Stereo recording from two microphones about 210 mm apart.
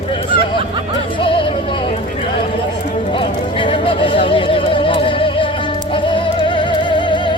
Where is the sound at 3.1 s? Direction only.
25° left (ahead or behind).